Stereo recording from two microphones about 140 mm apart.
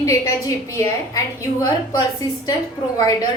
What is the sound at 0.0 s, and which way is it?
A woman's voice, 25° left (ahead or behind).